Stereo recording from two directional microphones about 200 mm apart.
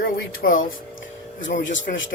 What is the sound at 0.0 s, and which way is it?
Music, 45° left (ahead or behind).